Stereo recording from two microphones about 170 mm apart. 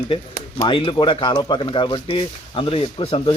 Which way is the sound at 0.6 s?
30° left (ahead or behind).